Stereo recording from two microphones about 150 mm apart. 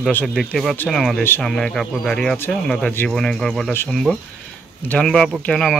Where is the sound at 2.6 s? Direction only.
5° left (ahead or behind).